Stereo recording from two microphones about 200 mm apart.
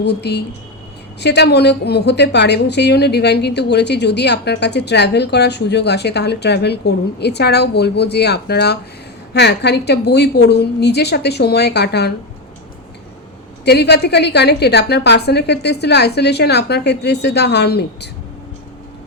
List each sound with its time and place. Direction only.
0.0 s a woman's voice: 60° left (ahead or behind)
13.7 s a woman's voice: 55° left (ahead or behind)